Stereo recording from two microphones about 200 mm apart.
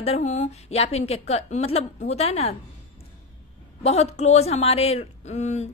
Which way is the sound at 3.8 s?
35° left (ahead or behind).